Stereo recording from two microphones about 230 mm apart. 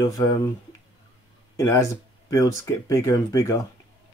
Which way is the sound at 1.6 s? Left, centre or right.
Centre.